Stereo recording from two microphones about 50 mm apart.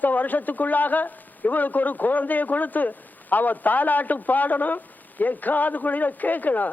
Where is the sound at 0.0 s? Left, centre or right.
Left.